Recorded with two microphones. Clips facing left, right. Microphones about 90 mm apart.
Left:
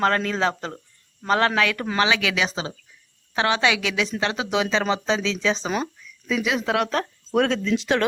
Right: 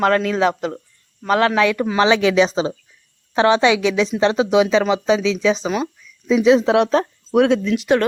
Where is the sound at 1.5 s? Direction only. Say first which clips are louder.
Right 6 dB; 20° right (ahead or behind).